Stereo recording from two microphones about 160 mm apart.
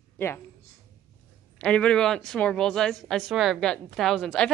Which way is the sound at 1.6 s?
5° left (ahead or behind).